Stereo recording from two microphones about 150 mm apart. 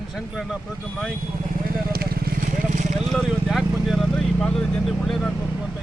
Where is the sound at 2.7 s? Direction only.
55° right (ahead or behind).